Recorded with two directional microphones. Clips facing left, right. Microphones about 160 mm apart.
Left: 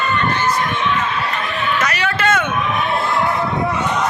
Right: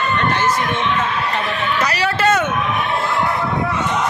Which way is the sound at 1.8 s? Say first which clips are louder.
Right 4 dB; 35° right (ahead or behind).